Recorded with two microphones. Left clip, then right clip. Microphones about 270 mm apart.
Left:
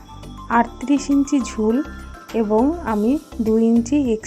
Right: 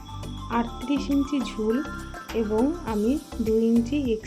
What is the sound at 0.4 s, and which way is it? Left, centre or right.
Speech, centre.